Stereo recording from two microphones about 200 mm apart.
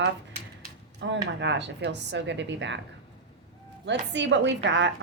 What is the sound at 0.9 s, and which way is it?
Speech, 60° right (ahead or behind).